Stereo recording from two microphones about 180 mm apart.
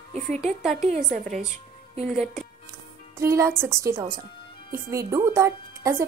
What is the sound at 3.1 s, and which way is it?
Speech, 15° right (ahead or behind).